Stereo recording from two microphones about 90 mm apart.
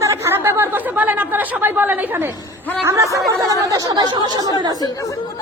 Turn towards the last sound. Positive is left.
turn(degrees=45)  # may be behind; listen again after turning